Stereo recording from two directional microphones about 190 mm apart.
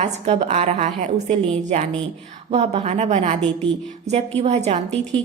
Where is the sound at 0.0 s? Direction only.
35° right (ahead or behind).